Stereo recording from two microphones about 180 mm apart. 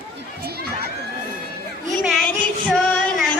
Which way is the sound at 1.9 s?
Centre (ahead or behind).